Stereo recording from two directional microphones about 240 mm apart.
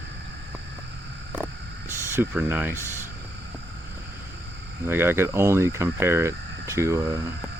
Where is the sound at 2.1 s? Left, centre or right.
Centre.